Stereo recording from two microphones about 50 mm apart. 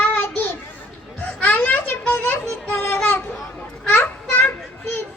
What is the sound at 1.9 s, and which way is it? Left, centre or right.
Music, left.